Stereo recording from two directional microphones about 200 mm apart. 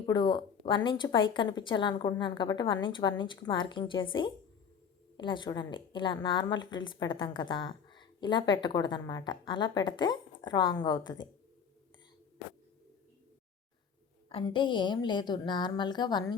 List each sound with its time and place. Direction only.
0.0 s a woman's voice: 20° left (ahead or behind)
14.3 s a woman's voice: 25° left (ahead or behind)